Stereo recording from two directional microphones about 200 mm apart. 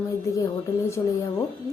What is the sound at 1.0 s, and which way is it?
Music, 20° left (ahead or behind).